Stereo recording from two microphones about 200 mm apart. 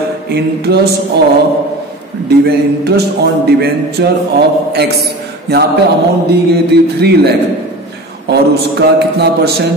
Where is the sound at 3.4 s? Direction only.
55° right (ahead or behind).